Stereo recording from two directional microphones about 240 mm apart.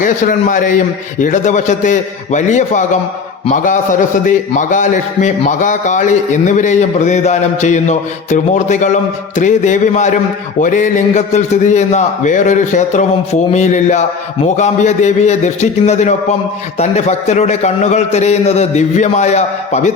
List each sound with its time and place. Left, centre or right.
0.0 s a man's voice: left